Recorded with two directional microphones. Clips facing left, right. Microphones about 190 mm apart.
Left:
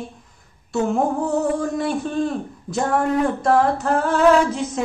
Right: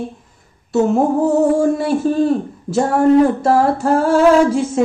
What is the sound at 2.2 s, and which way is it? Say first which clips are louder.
Speech: right 8 dB; 25° right (ahead or behind).